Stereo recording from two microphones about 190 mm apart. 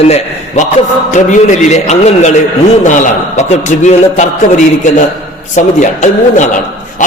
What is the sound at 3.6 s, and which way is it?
Speech, 40° left (ahead or behind).